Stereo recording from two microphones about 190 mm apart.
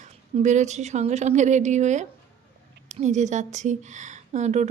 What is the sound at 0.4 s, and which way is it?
A woman's voice, 40° right (ahead or behind).